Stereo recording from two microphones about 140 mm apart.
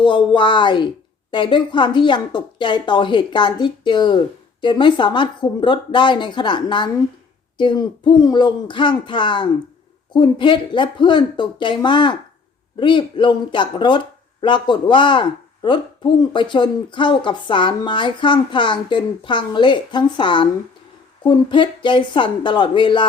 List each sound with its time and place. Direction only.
0.0 s speech: 35° left (ahead or behind)